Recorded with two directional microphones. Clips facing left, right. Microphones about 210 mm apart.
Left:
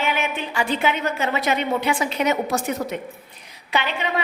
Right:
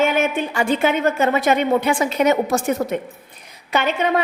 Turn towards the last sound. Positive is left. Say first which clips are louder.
# right 5 dB
turn(degrees=-45)  # may be behind; listen again after turning